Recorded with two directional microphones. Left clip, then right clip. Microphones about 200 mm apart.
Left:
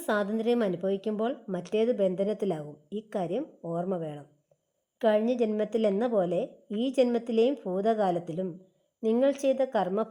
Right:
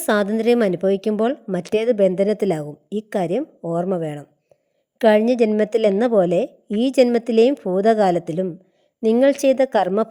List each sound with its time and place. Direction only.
0.0 s a woman's voice: 30° right (ahead or behind)